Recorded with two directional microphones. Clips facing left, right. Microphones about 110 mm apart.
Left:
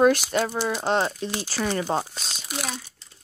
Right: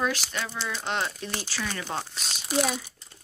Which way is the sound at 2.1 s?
Centre (ahead or behind).